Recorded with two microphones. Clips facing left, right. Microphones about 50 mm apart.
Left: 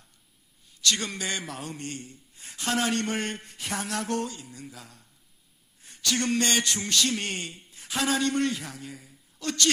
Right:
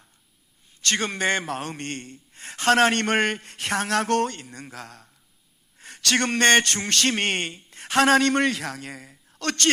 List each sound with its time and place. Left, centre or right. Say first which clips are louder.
0.8 s a man's voice: right 4 dB; right
5.8 s a sound: right 5 dB; right
6.3 s a man's voice: right 11 dB; right